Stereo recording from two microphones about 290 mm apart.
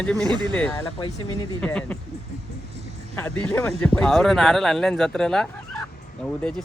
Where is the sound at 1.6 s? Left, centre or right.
Centre.